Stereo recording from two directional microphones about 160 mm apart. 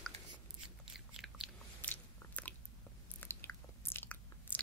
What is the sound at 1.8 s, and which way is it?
Biting, 10° left (ahead or behind).